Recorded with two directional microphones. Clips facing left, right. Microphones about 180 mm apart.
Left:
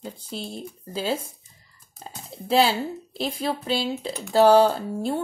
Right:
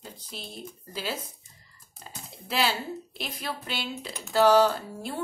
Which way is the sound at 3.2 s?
30° left (ahead or behind).